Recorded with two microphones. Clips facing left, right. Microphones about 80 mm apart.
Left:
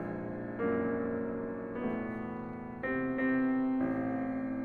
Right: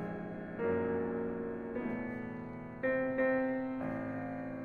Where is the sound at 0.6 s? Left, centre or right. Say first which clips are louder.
Left 1 dB; left.